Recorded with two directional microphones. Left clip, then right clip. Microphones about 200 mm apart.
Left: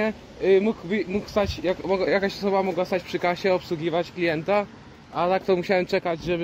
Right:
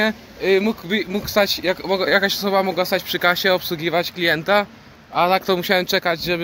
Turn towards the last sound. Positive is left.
turn(degrees=-15)  # may be behind; listen again after turning